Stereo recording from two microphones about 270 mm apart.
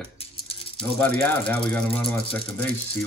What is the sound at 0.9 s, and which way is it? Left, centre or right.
A man's voice, centre.